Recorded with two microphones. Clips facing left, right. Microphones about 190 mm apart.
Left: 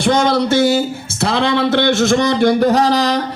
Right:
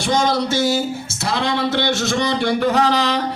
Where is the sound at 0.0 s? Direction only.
60° left (ahead or behind).